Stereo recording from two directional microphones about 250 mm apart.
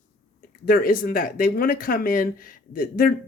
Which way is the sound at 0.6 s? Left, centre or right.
Left.